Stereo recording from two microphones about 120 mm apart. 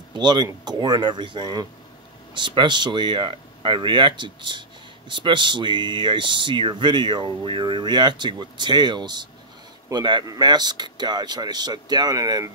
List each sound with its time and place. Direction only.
0.1 s speech: 40° right (ahead or behind)